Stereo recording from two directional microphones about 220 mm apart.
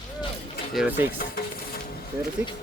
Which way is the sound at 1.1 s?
40° left (ahead or behind).